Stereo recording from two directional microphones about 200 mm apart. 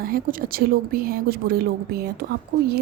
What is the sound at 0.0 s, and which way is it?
A woman's voice, 45° right (ahead or behind).